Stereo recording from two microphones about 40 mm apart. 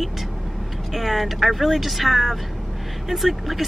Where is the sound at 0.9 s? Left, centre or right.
Centre.